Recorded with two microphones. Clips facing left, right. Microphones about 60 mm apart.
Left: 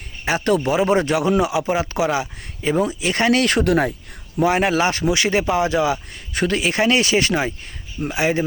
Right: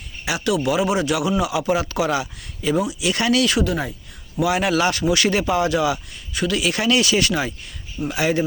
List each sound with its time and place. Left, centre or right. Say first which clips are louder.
0.3 s speech: left 2 dB; left
4.4 s speech: left 2 dB; left
6.3 s speech: left 2 dB; left